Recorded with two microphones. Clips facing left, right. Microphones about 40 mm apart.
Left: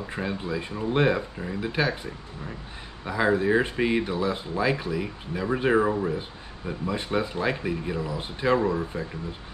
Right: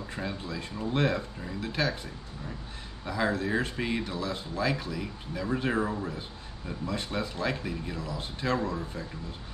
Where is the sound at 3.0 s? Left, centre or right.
Left.